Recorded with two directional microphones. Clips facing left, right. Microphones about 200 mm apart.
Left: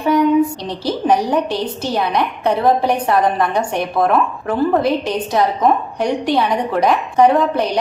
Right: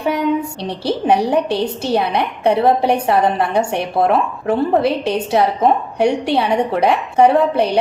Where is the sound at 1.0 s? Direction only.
30° right (ahead or behind).